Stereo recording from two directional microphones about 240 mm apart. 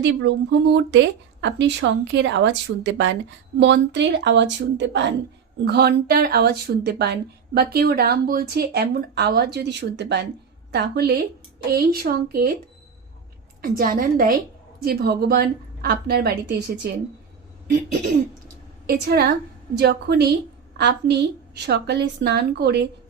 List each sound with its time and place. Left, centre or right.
0.0 s speech: right
13.6 s speech: right
18.9 s speech: right